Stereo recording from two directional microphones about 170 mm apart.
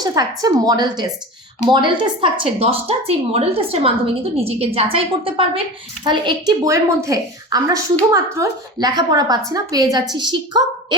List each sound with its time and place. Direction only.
0.0 s a woman's voice: 20° right (ahead or behind)